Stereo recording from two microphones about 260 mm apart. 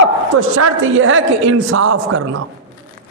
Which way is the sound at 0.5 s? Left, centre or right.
Right.